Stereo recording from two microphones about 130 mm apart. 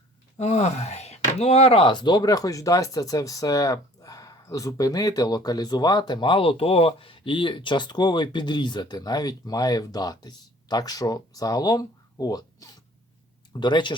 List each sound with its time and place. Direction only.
0.3 s speech: 55° left (ahead or behind); by 13.9 s 35° left (ahead or behind)